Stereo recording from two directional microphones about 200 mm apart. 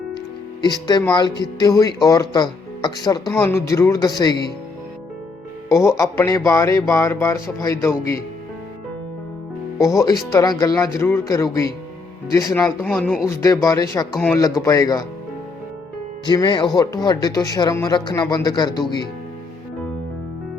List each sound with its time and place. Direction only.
0.6 s speech: 20° left (ahead or behind)
5.6 s speech: 15° left (ahead or behind)
9.7 s speech: 15° left (ahead or behind)
16.2 s speech: 20° left (ahead or behind)